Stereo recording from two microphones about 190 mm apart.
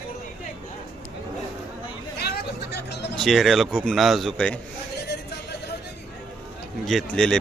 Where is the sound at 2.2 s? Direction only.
55° left (ahead or behind).